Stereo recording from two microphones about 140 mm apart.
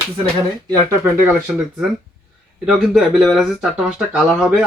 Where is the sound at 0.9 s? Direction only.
15° right (ahead or behind).